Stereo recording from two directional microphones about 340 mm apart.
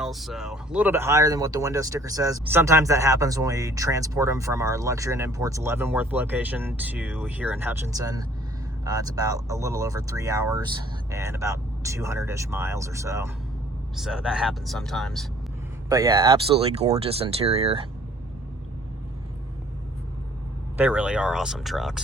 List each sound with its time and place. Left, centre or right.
0.0 s speech: centre
15.9 s speech: centre
20.7 s speech: centre